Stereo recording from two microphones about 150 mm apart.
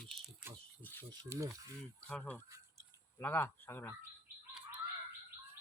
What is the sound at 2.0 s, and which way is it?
Speech, 10° left (ahead or behind).